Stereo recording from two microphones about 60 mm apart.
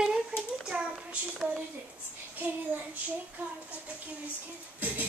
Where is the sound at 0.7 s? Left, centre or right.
Centre.